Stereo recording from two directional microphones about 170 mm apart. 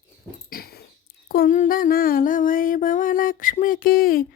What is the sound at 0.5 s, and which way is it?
Dog, 65° left (ahead or behind).